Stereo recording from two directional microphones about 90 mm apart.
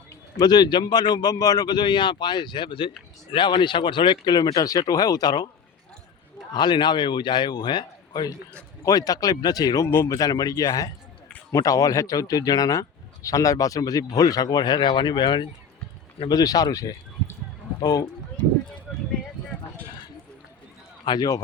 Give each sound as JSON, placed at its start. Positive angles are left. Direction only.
{"t": 0.3, "sound": "a man's voice", "side_deg": 50}
{"t": 6.5, "sound": "a man's voice", "side_deg": 55}
{"t": 8.8, "sound": "speech", "side_deg": 45}
{"t": 9.8, "sound": "speech", "side_deg": 30}
{"t": 10.1, "sound": "speech", "side_deg": 45}
{"t": 16.3, "sound": "speech", "side_deg": 45}
{"t": 17.7, "sound": "speech", "side_deg": 45}
{"t": 21.0, "sound": "a man's voice", "side_deg": 50}